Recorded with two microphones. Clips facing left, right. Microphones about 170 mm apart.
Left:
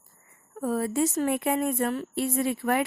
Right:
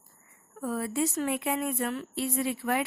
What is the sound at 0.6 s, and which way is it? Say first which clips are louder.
A woman's voice: left 4 dB; 40° left (ahead or behind).